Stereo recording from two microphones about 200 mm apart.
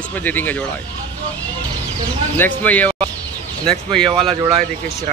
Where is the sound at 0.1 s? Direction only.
10° left (ahead or behind).